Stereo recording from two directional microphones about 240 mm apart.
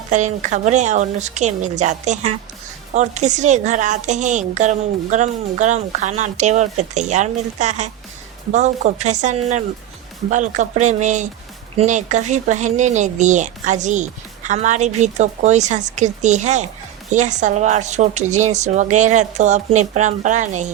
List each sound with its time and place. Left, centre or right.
0.1 s a woman's voice: right